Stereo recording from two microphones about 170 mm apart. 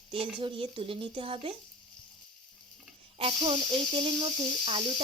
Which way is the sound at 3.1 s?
30° right (ahead or behind).